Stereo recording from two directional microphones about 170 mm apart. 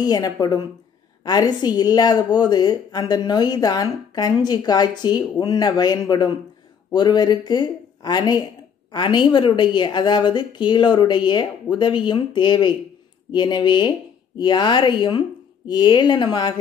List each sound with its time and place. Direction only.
0.0 s a woman's voice: 20° left (ahead or behind)